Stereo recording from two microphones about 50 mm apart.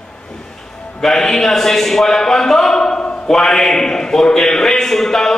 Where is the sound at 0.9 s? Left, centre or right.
Centre.